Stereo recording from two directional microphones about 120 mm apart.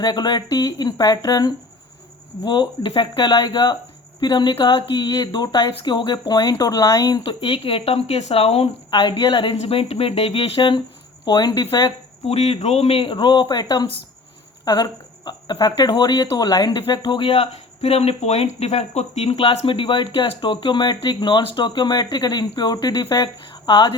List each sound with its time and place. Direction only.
0.0 s speech: 35° left (ahead or behind)
7.3 s a woman's voice: 50° left (ahead or behind)
11.3 s speech: 35° left (ahead or behind)
12.2 s a woman's voice: 55° left (ahead or behind); by 24.0 s 40° left (ahead or behind)